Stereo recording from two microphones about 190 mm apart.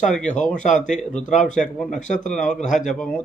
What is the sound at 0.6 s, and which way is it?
Speech, 40° left (ahead or behind).